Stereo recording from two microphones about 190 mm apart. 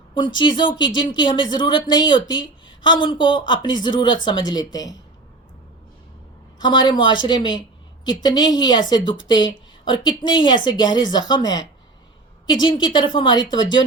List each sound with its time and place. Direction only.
0.3 s speech: 25° left (ahead or behind)
6.6 s speech: 25° left (ahead or behind)